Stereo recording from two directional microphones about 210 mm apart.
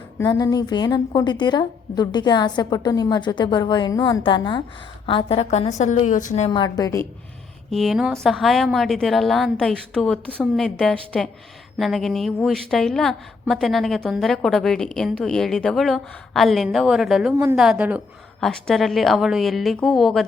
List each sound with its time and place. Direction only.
0.2 s a woman's voice: 15° left (ahead or behind); by 6.5 s 35° left (ahead or behind)
6.5 s a woman's voice: 20° left (ahead or behind)
7.7 s a woman's voice: centre (ahead or behind)